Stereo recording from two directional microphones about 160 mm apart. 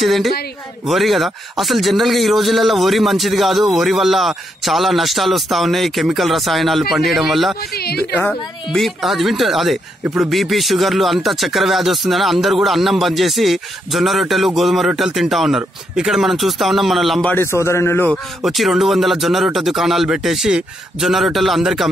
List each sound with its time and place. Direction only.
0.0 s speech: centre (ahead or behind)
7.7 s a woman's voice: 80° left
8.2 s speech: 5° left (ahead or behind)
18.1 s speech: centre (ahead or behind)